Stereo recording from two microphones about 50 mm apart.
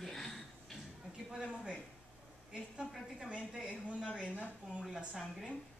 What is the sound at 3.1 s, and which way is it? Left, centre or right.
A woman's voice, right.